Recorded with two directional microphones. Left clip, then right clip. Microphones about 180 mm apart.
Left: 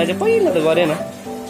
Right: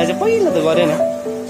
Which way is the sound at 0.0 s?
Centre (ahead or behind).